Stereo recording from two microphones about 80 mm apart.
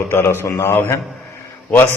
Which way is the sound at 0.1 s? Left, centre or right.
Left.